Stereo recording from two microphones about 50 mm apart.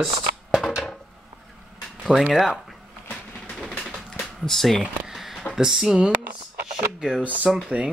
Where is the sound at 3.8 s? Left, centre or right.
Centre.